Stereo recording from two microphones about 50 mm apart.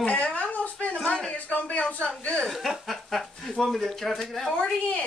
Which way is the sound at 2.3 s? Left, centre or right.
Centre.